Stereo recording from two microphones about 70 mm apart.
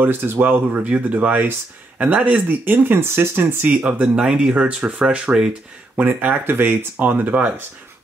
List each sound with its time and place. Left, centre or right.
0.0 s speech: right
3.7 s speech: centre
5.9 s speech: right